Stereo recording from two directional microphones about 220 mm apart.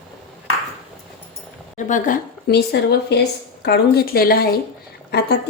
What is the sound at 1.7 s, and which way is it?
Speech, 35° left (ahead or behind).